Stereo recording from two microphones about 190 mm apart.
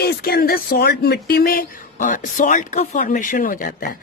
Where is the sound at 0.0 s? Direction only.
55° left (ahead or behind).